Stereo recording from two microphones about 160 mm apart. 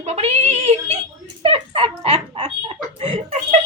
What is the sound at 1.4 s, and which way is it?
Dog, 35° right (ahead or behind).